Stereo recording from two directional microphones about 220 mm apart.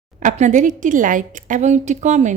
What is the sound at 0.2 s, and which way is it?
A woman's voice, 30° right (ahead or behind).